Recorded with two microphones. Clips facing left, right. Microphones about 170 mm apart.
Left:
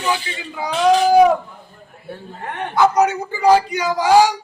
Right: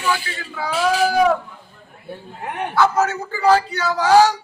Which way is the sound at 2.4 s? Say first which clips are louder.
Right 1 dB; 10° right (ahead or behind).